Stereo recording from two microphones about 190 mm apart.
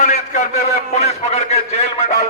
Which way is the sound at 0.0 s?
40° left (ahead or behind).